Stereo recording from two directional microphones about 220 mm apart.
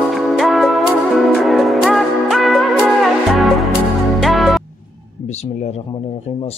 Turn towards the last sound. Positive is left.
turn(degrees=0)  # may be behind; listen again after turning